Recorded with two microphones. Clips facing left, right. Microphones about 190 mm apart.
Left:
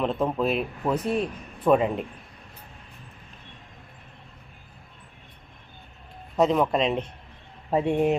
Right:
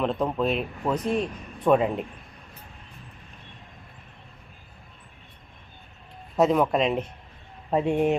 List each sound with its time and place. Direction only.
0.0 s speech: 5° left (ahead or behind)
6.3 s speech: centre (ahead or behind)